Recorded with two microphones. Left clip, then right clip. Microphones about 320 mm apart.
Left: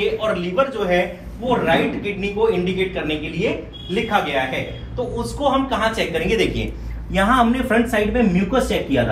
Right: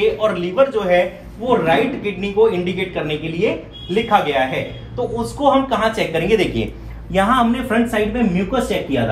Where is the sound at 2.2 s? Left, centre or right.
Right.